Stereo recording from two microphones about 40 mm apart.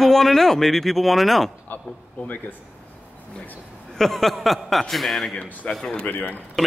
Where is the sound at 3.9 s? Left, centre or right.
Centre.